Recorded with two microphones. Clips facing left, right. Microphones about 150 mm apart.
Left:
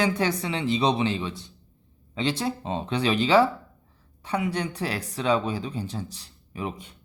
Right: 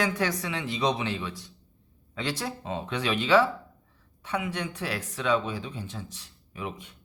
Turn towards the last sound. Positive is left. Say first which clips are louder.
# left 4 dB
turn(degrees=35)  # may be behind; listen again after turning